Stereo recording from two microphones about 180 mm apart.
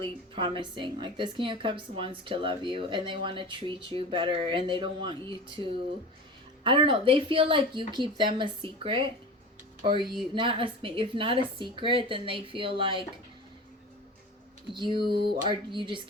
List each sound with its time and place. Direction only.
0.0 s a woman's voice: 30° right (ahead or behind)
14.7 s a woman's voice: 25° right (ahead or behind)